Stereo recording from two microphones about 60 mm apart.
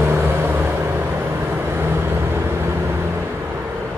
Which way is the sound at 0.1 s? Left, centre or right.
Right.